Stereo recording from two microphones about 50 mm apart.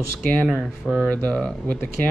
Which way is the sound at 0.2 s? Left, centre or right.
Left.